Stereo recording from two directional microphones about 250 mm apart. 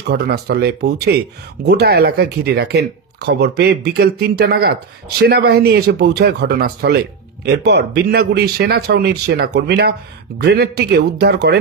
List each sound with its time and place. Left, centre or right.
0.1 s speech: right